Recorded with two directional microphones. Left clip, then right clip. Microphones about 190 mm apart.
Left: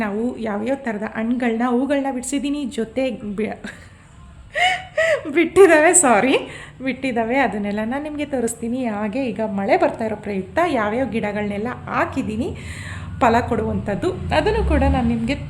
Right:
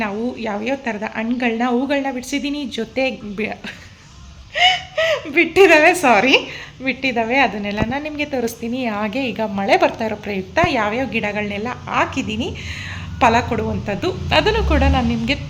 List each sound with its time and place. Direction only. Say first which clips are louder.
0.0 s a woman's voice: right 1 dB; 10° left (ahead or behind)